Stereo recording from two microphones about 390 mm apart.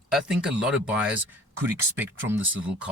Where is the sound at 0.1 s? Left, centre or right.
Centre.